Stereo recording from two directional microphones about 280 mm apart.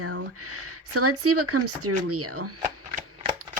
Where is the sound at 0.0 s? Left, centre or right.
Right.